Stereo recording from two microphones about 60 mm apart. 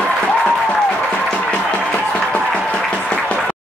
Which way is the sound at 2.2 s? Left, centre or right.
Centre.